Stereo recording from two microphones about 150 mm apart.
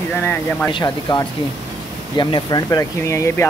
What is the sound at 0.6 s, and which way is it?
Speech, 30° left (ahead or behind).